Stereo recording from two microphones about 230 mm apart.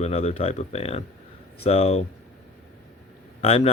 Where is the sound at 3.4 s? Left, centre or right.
Left.